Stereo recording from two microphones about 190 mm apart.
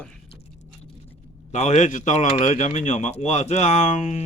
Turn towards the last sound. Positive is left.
turn(degrees=40)  # may be behind; listen again after turning